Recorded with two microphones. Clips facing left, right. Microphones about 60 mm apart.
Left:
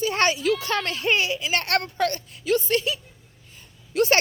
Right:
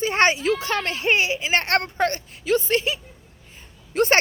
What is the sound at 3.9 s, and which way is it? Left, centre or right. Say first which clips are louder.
Speech: right 1 dB; right.